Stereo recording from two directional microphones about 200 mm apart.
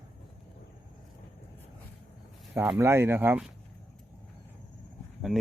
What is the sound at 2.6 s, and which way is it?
Speech, 10° right (ahead or behind).